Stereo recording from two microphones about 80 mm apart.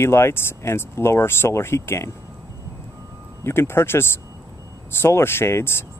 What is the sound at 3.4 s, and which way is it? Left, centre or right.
Speech, left.